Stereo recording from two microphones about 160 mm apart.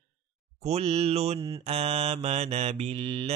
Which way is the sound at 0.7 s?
40° right (ahead or behind).